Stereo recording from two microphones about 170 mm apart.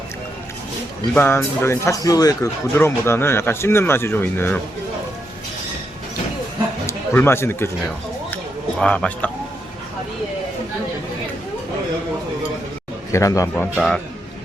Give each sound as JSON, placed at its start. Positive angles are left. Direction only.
{"t": 1.1, "sound": "speech", "side_deg": 10}
{"t": 6.8, "sound": "speech", "side_deg": 15}
{"t": 8.8, "sound": "a man's voice", "side_deg": 5}
{"t": 13.1, "sound": "speech", "side_deg": 20}
{"t": 13.7, "sound": "a man's voice", "side_deg": 5}